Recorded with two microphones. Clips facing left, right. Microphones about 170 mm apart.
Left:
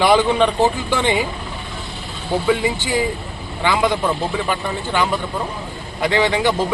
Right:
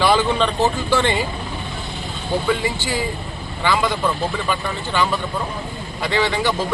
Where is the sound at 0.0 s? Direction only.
15° left (ahead or behind).